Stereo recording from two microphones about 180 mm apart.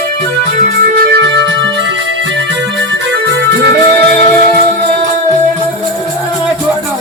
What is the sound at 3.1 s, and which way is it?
Music, 75° right (ahead or behind).